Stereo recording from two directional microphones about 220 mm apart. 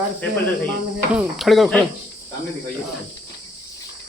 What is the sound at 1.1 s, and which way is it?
Speech, centre (ahead or behind).